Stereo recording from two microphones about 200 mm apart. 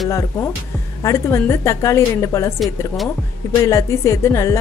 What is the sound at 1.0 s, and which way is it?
A woman's voice, 15° left (ahead or behind).